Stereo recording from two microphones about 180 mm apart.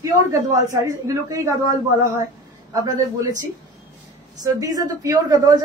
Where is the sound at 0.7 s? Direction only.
20° right (ahead or behind).